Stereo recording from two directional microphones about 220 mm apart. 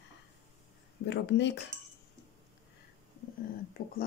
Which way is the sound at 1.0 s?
50° left (ahead or behind).